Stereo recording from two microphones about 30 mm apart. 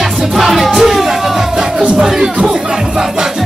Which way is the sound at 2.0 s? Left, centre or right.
Right.